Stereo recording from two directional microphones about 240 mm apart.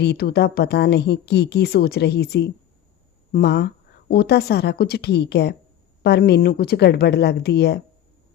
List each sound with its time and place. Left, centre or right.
0.0 s speech: left